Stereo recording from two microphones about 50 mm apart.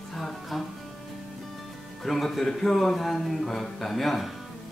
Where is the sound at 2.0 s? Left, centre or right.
Centre.